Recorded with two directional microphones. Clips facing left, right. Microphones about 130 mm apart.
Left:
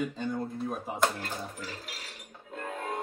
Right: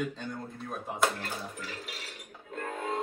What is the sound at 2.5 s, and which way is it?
Music, centre (ahead or behind).